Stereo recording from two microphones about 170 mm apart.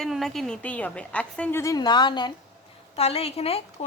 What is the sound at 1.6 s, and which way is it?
A woman's voice, 20° left (ahead or behind).